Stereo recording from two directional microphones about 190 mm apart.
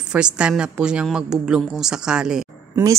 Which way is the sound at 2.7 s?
15° right (ahead or behind).